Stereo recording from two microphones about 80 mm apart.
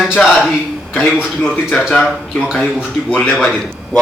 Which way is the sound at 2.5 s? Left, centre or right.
Centre.